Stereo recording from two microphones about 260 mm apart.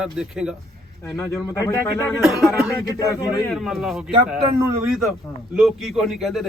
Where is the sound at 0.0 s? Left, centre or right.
Centre.